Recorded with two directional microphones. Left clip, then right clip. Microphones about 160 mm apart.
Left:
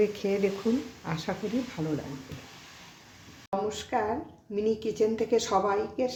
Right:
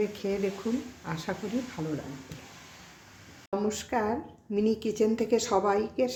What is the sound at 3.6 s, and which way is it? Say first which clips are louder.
Speech: right 1 dB; 25° right (ahead or behind).